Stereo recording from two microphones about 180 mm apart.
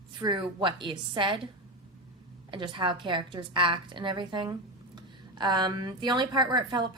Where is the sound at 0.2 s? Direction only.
25° right (ahead or behind).